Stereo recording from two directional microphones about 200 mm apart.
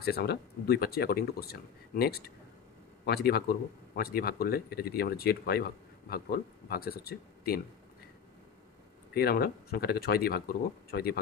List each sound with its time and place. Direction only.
0.0 s speech: 50° left (ahead or behind)
9.1 s speech: 50° left (ahead or behind)